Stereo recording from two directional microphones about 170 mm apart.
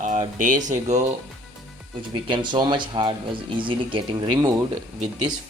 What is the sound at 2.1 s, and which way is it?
Speech, 30° right (ahead or behind).